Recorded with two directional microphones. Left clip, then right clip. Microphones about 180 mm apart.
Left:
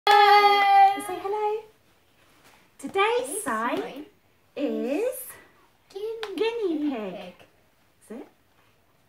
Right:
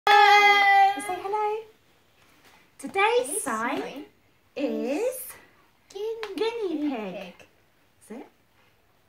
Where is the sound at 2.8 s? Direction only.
10° left (ahead or behind).